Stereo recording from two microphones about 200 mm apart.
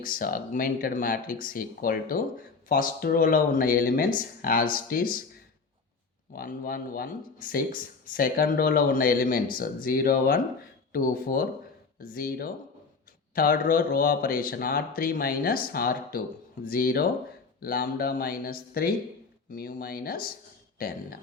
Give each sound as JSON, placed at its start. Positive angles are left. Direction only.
{"t": 0.0, "sound": "speech", "side_deg": 45}
{"t": 6.3, "sound": "speech", "side_deg": 45}